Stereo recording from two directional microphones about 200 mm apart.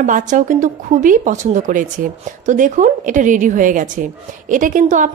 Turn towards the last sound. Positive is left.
turn(degrees=-40)  # may be behind; listen again after turning